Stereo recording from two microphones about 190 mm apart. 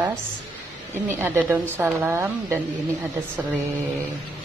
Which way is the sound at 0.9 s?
10° right (ahead or behind).